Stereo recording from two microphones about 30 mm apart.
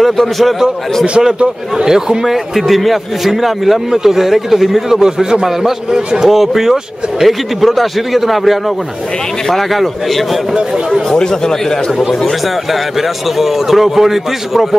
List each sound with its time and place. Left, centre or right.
1.8 s a man's voice: centre
2.2 s a man's voice: centre; by 6.0 s right
6.2 s speech: centre
13.4 s a man's voice: centre